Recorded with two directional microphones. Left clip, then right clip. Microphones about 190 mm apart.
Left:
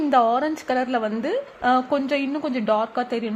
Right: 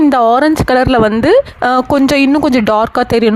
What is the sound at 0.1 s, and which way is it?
A woman's voice, 50° right (ahead or behind).